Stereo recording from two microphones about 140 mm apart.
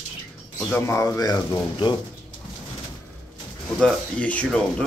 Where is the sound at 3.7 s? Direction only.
5° left (ahead or behind).